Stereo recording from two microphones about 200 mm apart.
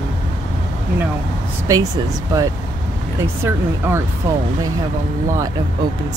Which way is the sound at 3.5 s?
10° right (ahead or behind).